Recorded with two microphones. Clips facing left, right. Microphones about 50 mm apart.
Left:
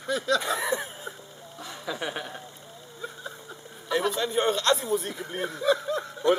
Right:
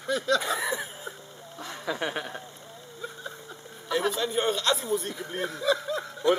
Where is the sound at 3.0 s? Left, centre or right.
Centre.